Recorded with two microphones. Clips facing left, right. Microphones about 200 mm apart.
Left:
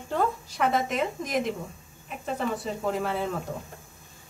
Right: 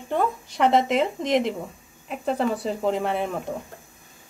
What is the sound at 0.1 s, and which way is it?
A woman's voice, 25° right (ahead or behind).